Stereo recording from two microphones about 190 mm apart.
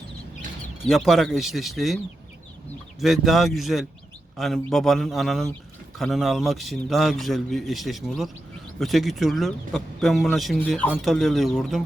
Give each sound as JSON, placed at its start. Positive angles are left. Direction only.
{"t": 0.9, "sound": "speech", "side_deg": 0}
{"t": 3.0, "sound": "speech", "side_deg": 0}